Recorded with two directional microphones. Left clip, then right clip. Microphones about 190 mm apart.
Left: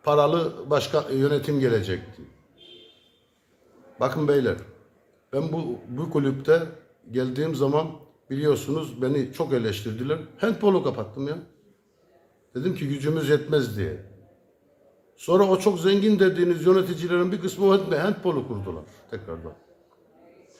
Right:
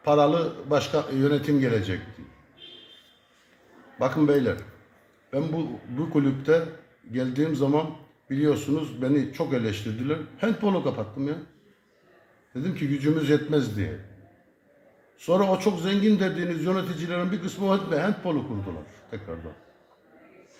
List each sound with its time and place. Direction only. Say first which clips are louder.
0.0 s a man's voice: even; 25° left (ahead or behind)
3.9 s a man's voice: even; 25° left (ahead or behind)
12.5 s a man's voice: left 1 dB; 25° left (ahead or behind)
15.2 s a man's voice: left 3 dB; 25° left (ahead or behind)